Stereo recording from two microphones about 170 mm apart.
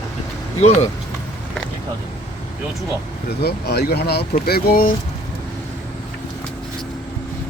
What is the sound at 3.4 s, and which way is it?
Speech, 70° left (ahead or behind).